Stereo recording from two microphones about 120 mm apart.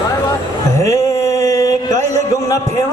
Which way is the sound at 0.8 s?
25° left (ahead or behind).